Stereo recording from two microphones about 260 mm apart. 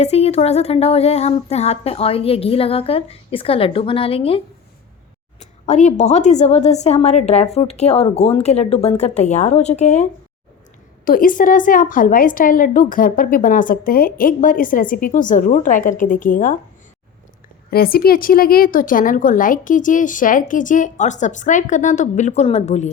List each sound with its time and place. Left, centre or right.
0.0 s a woman's voice: left
17.7 s a woman's voice: left